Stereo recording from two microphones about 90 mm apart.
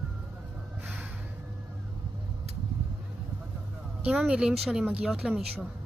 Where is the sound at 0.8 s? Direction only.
15° right (ahead or behind).